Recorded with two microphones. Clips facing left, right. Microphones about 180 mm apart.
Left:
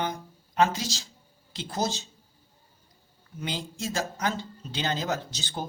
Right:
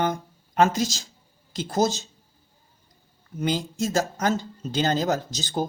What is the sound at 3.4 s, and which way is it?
Speech, 45° right (ahead or behind).